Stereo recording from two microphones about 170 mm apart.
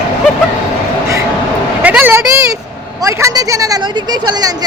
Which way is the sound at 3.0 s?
20° right (ahead or behind).